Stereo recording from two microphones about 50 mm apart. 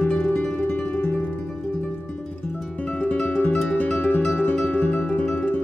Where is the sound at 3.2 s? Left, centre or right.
Left.